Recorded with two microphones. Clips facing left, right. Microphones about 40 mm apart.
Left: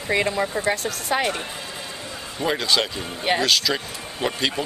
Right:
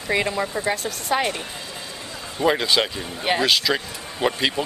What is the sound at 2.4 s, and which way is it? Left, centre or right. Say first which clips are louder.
A man's voice: right 3 dB; centre.